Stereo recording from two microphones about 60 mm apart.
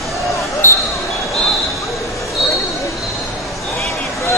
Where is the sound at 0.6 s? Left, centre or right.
Left.